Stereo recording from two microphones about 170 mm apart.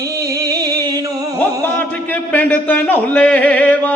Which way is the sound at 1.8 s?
10° left (ahead or behind).